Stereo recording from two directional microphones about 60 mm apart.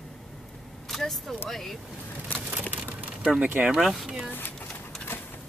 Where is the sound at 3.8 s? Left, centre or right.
Centre.